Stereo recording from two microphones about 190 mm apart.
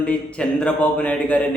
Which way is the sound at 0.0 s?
5° left (ahead or behind).